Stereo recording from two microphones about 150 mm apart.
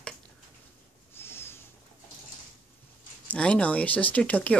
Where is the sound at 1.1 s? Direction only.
15° left (ahead or behind).